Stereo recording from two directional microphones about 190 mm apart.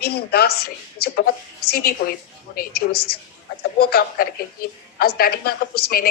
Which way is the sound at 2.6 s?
55° left (ahead or behind).